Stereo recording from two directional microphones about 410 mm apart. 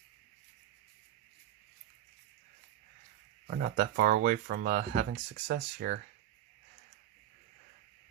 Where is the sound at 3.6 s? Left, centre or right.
Right.